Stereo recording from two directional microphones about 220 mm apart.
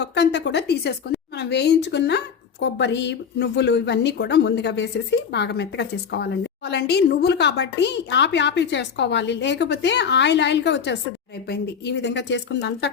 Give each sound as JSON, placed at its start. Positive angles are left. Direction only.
{"t": 0.0, "sound": "a woman's voice", "side_deg": 50}